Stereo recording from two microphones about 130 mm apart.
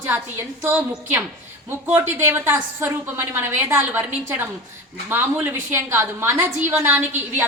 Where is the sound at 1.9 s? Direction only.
15° right (ahead or behind).